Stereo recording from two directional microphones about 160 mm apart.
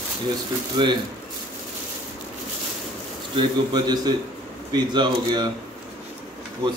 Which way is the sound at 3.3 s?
30° right (ahead or behind).